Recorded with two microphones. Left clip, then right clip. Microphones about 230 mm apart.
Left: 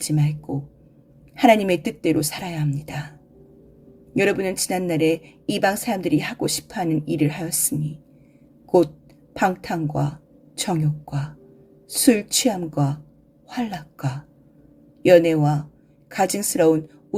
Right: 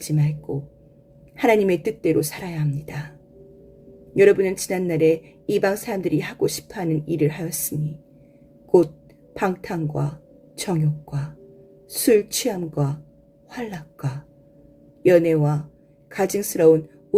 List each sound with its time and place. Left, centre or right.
0.0 s a woman's voice: left
1.4 s a woman's voice: left
4.2 s a woman's voice: left
9.3 s a woman's voice: left